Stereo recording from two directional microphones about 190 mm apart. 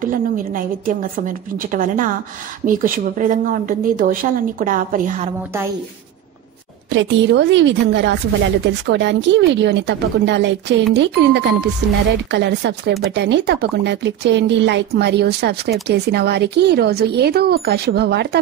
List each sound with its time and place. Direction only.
0.0 s speech: 45° right (ahead or behind)
6.9 s speech: 70° right (ahead or behind)